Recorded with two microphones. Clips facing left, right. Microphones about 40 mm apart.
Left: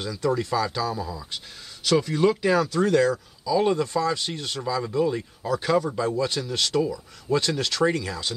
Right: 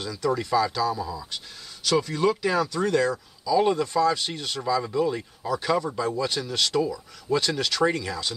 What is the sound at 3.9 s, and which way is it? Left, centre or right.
Speech, centre.